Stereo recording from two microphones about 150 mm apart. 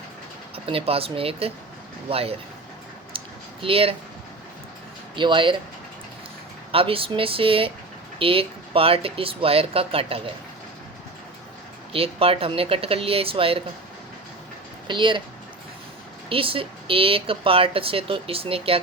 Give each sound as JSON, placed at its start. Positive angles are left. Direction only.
{"t": 0.5, "sound": "speech", "side_deg": -40}
{"t": 3.1, "sound": "a sound", "side_deg": -35}
{"t": 3.6, "sound": "speech", "side_deg": -40}
{"t": 5.1, "sound": "speech", "side_deg": -35}
{"t": 6.7, "sound": "speech", "side_deg": -40}
{"t": 11.9, "sound": "speech", "side_deg": -40}
{"t": 14.8, "sound": "speech", "side_deg": -30}
{"t": 16.3, "sound": "speech", "side_deg": -35}